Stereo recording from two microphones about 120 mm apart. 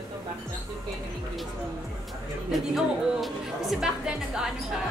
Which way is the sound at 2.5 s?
Centre (ahead or behind).